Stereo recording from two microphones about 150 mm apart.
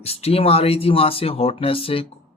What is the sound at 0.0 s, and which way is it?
Speech, 40° left (ahead or behind).